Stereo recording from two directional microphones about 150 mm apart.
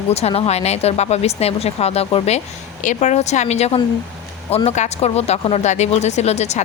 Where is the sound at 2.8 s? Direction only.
55° left (ahead or behind).